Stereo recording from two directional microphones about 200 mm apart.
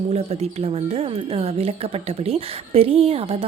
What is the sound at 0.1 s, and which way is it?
Speech, 30° right (ahead or behind).